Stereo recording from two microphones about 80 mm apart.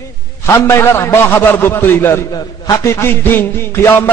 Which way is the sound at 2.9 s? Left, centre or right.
Left.